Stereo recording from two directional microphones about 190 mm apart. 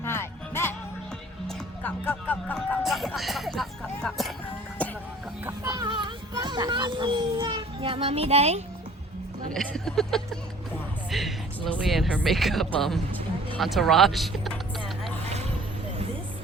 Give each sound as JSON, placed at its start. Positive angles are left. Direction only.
{"t": 0.0, "sound": "music", "side_deg": 15}
{"t": 5.5, "sound": "children playing", "side_deg": -20}
{"t": 9.5, "sound": "speech", "side_deg": 5}